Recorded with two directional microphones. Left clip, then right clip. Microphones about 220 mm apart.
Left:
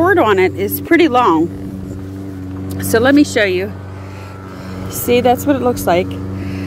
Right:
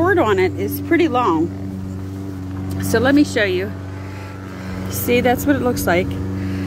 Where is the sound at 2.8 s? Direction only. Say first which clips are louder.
Left 4 dB; 35° left (ahead or behind).